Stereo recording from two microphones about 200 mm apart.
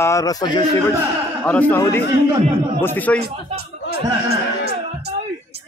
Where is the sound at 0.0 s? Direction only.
15° left (ahead or behind).